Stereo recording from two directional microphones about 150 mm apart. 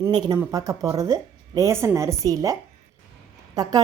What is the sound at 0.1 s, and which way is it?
A woman's voice, 30° right (ahead or behind).